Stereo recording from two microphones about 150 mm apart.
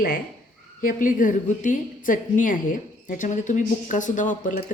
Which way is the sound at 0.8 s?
65° left (ahead or behind).